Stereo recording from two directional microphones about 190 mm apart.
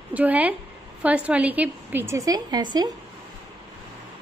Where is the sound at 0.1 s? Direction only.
10° right (ahead or behind).